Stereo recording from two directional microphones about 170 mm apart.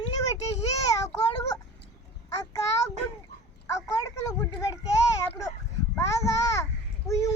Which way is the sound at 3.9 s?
20° left (ahead or behind).